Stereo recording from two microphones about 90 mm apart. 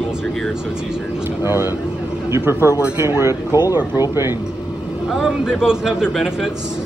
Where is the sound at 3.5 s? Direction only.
40° left (ahead or behind).